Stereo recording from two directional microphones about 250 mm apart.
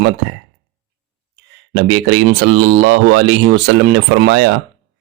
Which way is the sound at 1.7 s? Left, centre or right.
Right.